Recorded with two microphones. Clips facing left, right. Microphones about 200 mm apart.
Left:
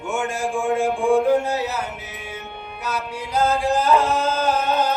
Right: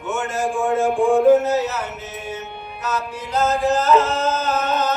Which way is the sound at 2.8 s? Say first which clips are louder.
Right 2 dB; 10° left (ahead or behind).